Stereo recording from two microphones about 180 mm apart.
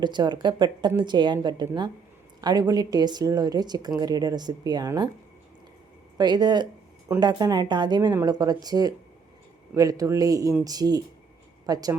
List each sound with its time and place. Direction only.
0.0 s a woman's voice: 25° right (ahead or behind)
6.1 s a woman's voice: 25° right (ahead or behind)